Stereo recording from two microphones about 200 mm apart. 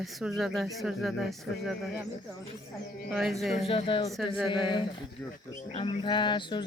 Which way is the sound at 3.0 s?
Centre (ahead or behind).